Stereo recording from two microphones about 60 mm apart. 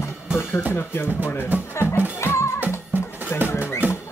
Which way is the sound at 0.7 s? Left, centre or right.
Left.